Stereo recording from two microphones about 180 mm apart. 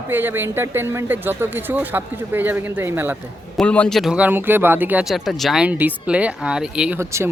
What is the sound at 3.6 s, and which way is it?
Speech, 5° left (ahead or behind).